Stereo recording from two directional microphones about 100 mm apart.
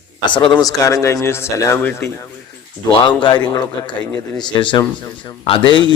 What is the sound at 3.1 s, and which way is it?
A man's voice, 50° left (ahead or behind).